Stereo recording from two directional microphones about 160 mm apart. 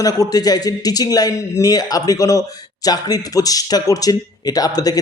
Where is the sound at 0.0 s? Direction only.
25° left (ahead or behind).